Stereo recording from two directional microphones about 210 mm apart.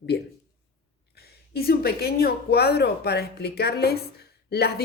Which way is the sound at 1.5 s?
45° left (ahead or behind).